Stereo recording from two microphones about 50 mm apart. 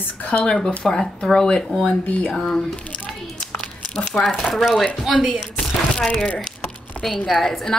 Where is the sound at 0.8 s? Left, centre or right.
Centre.